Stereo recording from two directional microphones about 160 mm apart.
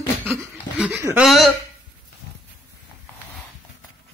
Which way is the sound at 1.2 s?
Centre (ahead or behind).